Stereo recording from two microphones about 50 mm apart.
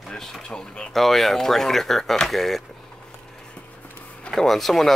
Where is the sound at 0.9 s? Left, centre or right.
Centre.